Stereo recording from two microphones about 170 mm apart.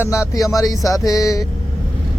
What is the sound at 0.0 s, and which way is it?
Music, 15° left (ahead or behind).